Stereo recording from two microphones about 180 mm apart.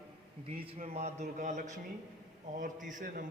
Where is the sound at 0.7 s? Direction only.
35° right (ahead or behind).